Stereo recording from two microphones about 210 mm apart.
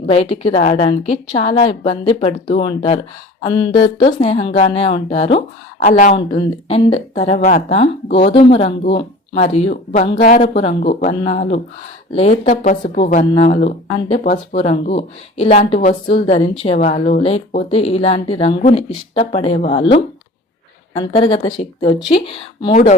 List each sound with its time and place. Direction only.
0.1 s speech: 30° left (ahead or behind)